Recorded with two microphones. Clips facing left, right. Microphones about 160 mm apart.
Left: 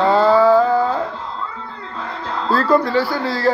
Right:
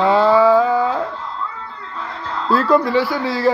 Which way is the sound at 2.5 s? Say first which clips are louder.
Right 1 dB; centre (ahead or behind).